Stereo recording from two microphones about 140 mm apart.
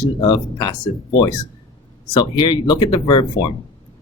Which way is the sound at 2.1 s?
35° left (ahead or behind).